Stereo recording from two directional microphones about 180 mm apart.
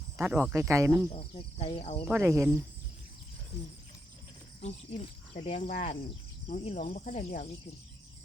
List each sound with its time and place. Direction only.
0.2 s speech: 10° right (ahead or behind)
1.1 s cricket: 35° left (ahead or behind)
2.1 s speech: 15° right (ahead or behind)
4.6 s cricket: 40° left (ahead or behind)